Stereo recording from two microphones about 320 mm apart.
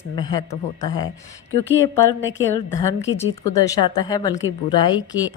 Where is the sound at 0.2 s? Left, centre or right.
Centre.